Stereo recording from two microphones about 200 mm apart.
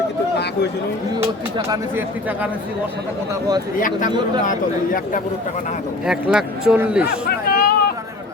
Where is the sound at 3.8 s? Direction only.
40° left (ahead or behind).